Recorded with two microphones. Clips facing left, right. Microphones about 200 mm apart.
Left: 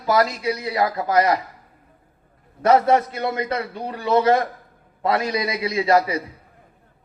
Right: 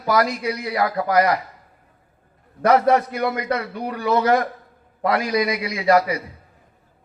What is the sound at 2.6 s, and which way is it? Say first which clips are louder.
A man's voice: even; 25° left (ahead or behind).